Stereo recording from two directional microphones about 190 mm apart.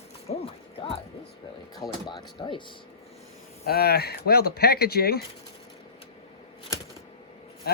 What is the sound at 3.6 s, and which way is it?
Speech, 55° left (ahead or behind).